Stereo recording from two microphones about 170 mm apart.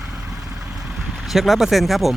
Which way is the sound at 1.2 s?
Centre (ahead or behind).